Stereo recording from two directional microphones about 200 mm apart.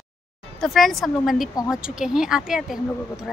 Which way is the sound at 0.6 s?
Centre (ahead or behind).